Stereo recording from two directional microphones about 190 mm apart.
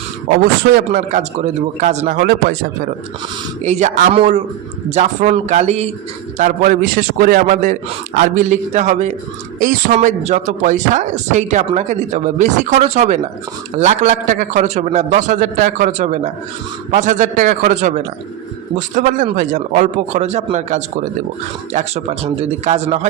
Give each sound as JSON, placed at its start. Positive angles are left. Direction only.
{"t": 0.6, "sound": "a man's voice", "side_deg": -50}
{"t": 3.6, "sound": "a man's voice", "side_deg": -40}